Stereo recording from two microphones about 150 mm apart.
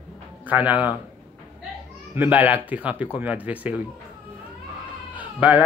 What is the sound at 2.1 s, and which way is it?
Speech, 10° right (ahead or behind).